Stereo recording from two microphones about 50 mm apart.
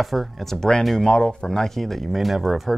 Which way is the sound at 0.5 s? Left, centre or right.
Centre.